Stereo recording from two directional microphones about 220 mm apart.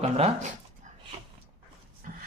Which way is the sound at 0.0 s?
30° right (ahead or behind).